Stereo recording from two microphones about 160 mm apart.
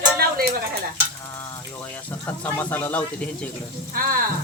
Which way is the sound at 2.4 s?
10° left (ahead or behind).